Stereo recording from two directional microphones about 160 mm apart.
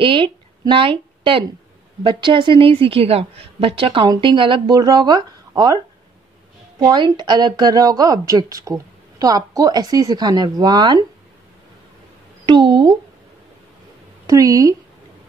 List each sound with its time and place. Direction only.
0.0 s a woman's voice: 30° right (ahead or behind)
6.8 s a woman's voice: 25° right (ahead or behind)
12.4 s a woman's voice: 30° right (ahead or behind)
14.2 s a woman's voice: 20° right (ahead or behind)